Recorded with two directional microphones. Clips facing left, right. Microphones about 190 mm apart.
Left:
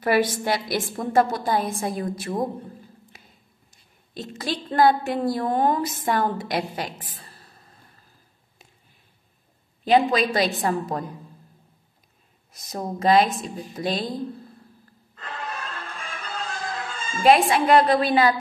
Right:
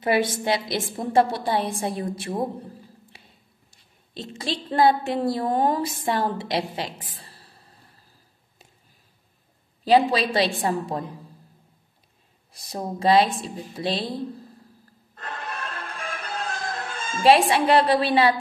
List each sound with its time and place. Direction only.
0.0 s a woman's voice: 25° right (ahead or behind)
7.2 s a sound: 30° right (ahead or behind)
9.8 s a woman's voice: 30° right (ahead or behind)
12.5 s a woman's voice: 30° right (ahead or behind)
15.1 s music: 50° right (ahead or behind)
17.2 s a woman's voice: 35° right (ahead or behind)